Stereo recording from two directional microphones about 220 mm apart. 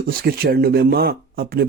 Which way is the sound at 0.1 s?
45° right (ahead or behind).